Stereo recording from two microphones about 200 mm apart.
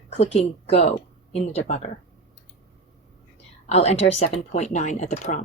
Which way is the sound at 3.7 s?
30° left (ahead or behind).